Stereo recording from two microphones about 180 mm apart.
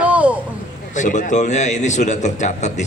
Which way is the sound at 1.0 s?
45° left (ahead or behind).